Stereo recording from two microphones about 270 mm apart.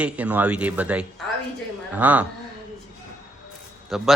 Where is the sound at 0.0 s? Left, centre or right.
Centre.